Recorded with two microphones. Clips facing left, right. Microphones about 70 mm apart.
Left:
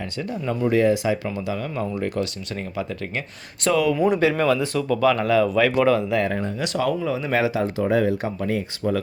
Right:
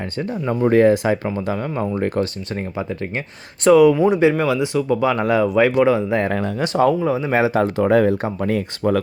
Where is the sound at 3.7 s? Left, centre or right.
Centre.